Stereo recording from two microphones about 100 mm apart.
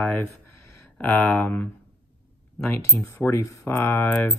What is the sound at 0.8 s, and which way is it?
Speech, 20° left (ahead or behind).